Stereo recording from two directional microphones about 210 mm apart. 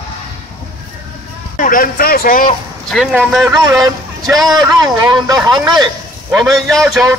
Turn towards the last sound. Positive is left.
turn(degrees=0)  # may be behind; listen again after turning